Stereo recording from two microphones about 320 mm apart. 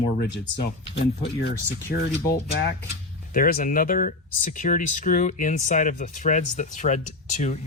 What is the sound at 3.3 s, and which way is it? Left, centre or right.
Speech, left.